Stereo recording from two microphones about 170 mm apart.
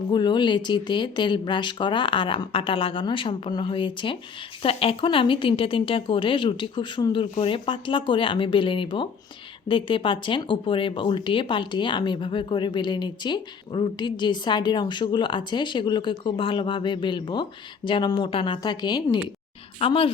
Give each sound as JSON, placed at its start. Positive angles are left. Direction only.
{"t": 0.1, "sound": "a woman's voice", "side_deg": 25}